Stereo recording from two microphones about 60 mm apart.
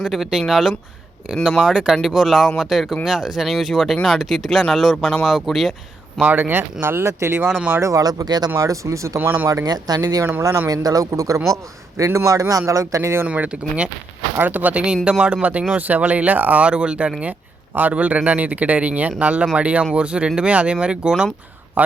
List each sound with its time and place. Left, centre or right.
0.0 s speech: centre
6.2 s speech: right
7.8 s speech: right
8.4 s speech: right
9.5 s speech: right
10.7 s speech: right
13.2 s speech: right
14.3 s speech: right
21.8 s a man's voice: right